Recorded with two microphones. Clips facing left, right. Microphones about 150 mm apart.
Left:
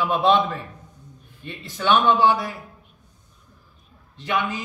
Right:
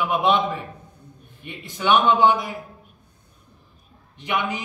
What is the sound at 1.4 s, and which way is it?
A man's voice, 15° right (ahead or behind).